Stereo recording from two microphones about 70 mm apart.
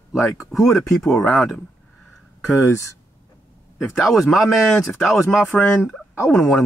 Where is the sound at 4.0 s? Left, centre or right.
Centre.